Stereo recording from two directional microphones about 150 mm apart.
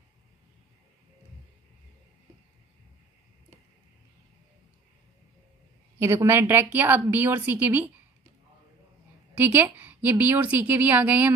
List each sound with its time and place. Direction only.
5.9 s a woman's voice: 20° right (ahead or behind)
9.4 s a woman's voice: 10° right (ahead or behind)